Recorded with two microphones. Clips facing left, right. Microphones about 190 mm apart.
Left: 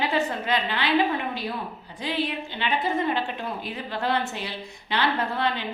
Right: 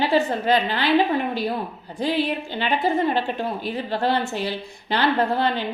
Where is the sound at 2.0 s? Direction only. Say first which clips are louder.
Right 5 dB; 35° right (ahead or behind).